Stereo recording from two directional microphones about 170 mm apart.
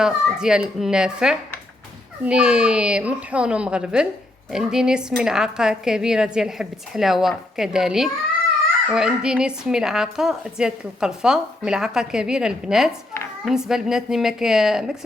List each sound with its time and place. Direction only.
0.0 s a woman's voice: 5° right (ahead or behind)